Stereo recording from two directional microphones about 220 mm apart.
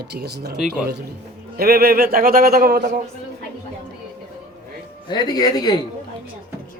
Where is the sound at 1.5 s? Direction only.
45° right (ahead or behind).